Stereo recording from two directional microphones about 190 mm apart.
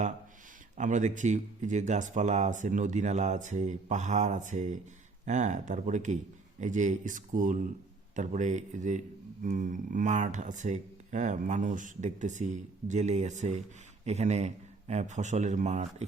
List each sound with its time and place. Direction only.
0.8 s speech: 40° right (ahead or behind)